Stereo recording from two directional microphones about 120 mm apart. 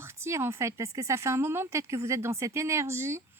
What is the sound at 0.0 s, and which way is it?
Speech, 20° right (ahead or behind).